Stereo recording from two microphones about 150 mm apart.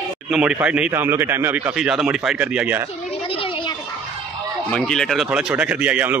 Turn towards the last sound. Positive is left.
turn(degrees=-10)  # may be behind; listen again after turning